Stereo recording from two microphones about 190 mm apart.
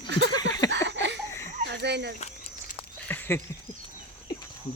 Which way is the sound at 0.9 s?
70° right (ahead or behind).